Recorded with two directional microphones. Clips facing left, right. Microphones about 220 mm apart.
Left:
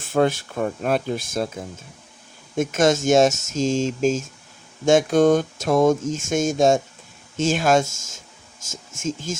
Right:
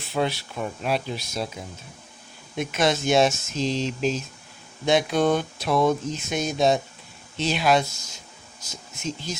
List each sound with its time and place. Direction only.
0.0 s speech: 50° left (ahead or behind)